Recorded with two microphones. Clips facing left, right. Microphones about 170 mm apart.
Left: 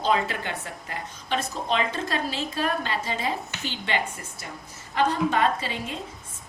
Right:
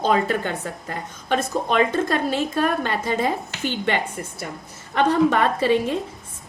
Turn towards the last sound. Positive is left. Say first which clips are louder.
# right 12 dB
turn(degrees=-60)  # may be behind; listen again after turning